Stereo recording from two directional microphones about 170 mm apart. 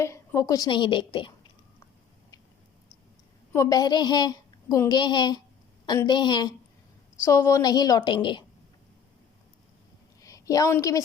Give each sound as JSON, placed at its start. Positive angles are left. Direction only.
{"t": 0.0, "sound": "speech", "side_deg": 15}
{"t": 3.5, "sound": "speech", "side_deg": 20}
{"t": 10.2, "sound": "a sound", "side_deg": 20}